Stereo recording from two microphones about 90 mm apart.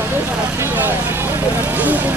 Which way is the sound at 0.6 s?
20° right (ahead or behind).